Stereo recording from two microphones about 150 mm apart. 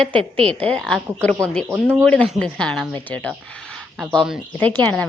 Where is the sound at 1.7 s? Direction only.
15° right (ahead or behind).